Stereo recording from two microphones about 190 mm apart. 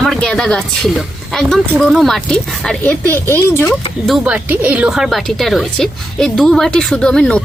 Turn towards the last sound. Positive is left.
turn(degrees=5)  # may be behind; listen again after turning